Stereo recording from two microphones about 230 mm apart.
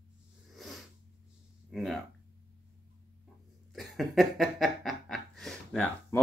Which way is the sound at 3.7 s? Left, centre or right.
Centre.